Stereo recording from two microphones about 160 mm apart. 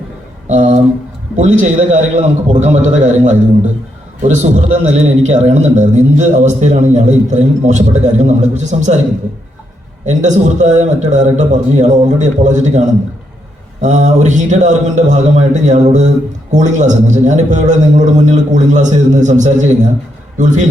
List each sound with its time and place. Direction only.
0.4 s a sound: 50° right (ahead or behind)
1.4 s a man's voice: 50° right (ahead or behind)
10.1 s a man's voice: 50° right (ahead or behind)